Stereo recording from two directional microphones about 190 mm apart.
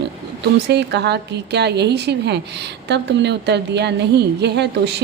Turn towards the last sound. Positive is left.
turn(degrees=-65)  # may be behind; listen again after turning